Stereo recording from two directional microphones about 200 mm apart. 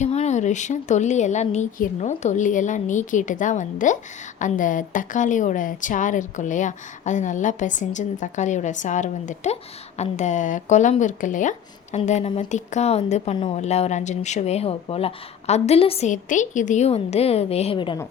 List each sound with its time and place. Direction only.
0.0 s speech: 35° left (ahead or behind)